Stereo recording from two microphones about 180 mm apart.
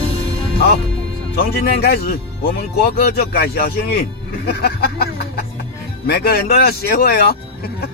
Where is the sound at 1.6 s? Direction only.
60° left (ahead or behind).